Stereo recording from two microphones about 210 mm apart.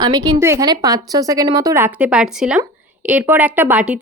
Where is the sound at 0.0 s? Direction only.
15° right (ahead or behind).